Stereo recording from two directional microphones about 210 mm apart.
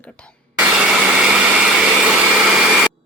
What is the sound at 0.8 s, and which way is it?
Vacuum cleaner, 5° right (ahead or behind).